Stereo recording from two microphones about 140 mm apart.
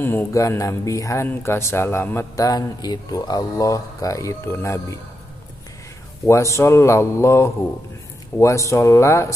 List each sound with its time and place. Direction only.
0.0 s speech: 15° left (ahead or behind)
6.2 s speech: 20° left (ahead or behind)